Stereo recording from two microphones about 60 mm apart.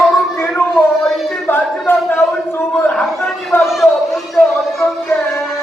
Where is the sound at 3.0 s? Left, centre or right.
Centre.